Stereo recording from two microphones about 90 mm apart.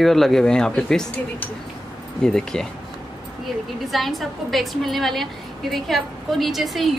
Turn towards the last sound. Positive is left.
turn(degrees=0)  # may be behind; listen again after turning